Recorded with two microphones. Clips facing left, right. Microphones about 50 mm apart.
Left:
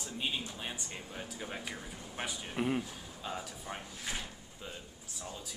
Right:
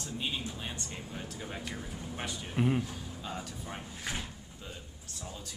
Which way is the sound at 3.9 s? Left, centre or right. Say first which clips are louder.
Right 2 dB; centre.